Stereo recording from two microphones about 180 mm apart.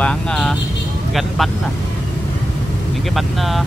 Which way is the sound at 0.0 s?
5° left (ahead or behind).